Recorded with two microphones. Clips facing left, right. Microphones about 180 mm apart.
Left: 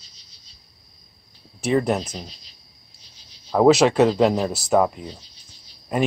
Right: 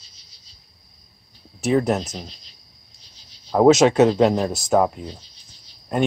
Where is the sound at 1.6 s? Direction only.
Centre (ahead or behind).